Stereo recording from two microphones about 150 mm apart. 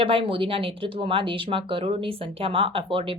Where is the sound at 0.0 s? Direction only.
35° right (ahead or behind).